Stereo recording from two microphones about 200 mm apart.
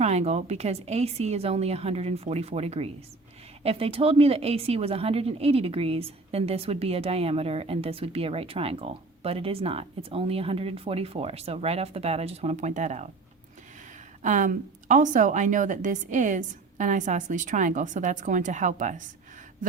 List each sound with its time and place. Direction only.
0.0 s a woman's voice: 35° right (ahead or behind)
14.2 s a woman's voice: 40° right (ahead or behind)